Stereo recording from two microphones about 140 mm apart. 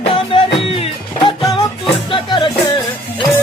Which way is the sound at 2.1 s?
35° left (ahead or behind).